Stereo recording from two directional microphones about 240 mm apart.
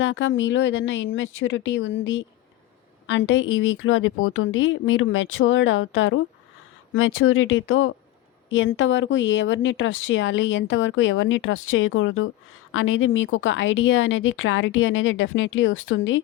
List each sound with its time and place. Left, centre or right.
0.0 s a woman's voice: left